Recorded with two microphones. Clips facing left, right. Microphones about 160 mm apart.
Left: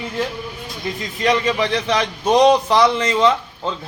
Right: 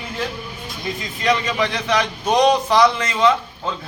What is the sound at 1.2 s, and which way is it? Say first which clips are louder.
A man's voice: left 2 dB; 30° left (ahead or behind).